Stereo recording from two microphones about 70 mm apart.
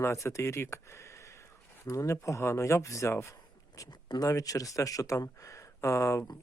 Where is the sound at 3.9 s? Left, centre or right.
Left.